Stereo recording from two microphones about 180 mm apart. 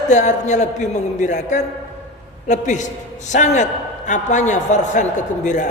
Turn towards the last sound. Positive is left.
turn(degrees=45)  # may be behind; listen again after turning